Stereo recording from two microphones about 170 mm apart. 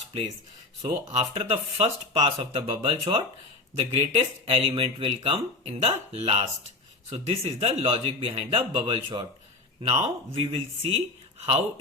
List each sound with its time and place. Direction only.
0.8 s speech: 40° right (ahead or behind)